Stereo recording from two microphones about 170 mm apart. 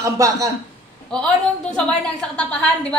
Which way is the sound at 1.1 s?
5° left (ahead or behind).